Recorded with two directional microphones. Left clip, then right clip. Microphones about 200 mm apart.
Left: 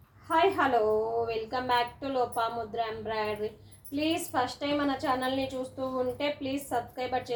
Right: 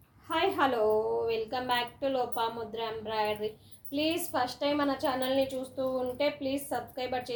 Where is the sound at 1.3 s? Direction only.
30° right (ahead or behind).